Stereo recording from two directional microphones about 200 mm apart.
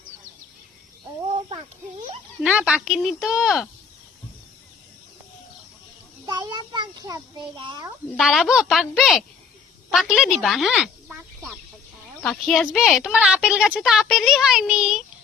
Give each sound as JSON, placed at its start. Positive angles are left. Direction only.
{"t": 2.4, "sound": "a woman's voice", "side_deg": -5}
{"t": 6.2, "sound": "a sound", "side_deg": -20}
{"t": 8.2, "sound": "a woman's voice", "side_deg": 0}